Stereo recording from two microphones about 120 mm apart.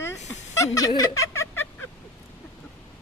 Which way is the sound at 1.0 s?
30° left (ahead or behind).